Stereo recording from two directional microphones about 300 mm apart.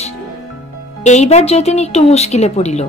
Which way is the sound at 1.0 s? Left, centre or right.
Left.